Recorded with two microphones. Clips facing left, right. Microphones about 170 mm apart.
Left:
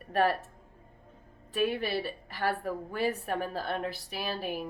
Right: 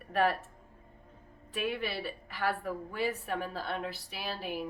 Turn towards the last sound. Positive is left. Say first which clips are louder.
# left 3 dB
turn(degrees=45)  # may be behind; listen again after turning